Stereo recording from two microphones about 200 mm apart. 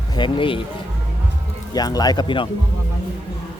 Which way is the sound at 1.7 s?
20° left (ahead or behind).